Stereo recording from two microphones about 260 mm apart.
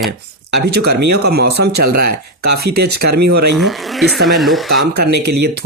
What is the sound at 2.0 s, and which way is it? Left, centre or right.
Speech, right.